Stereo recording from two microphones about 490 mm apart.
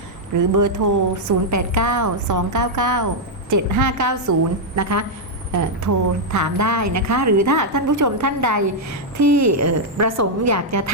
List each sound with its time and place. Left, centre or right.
0.3 s a woman's voice: right